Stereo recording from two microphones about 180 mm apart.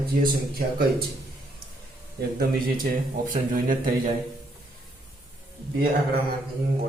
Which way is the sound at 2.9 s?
50° right (ahead or behind).